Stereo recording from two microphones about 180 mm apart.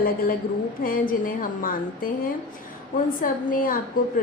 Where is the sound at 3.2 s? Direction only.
50° left (ahead or behind).